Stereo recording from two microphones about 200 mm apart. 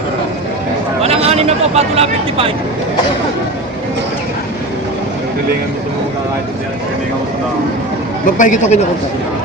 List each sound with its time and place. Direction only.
1.0 s speech: 30° right (ahead or behind)
8.4 s speech: 35° left (ahead or behind)